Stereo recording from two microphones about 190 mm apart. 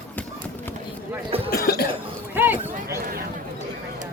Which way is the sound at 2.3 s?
10° right (ahead or behind).